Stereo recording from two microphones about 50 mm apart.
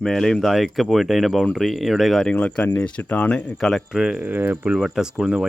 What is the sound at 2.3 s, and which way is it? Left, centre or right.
Speech, left.